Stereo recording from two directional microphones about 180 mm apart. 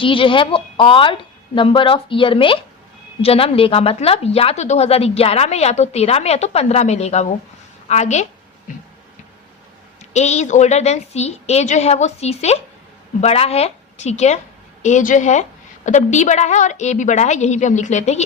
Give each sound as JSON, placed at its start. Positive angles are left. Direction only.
{"t": 0.0, "sound": "speech", "side_deg": 30}
{"t": 10.1, "sound": "speech", "side_deg": 40}